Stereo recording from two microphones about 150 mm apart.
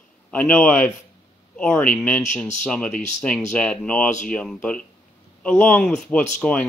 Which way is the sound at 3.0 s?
50° left (ahead or behind).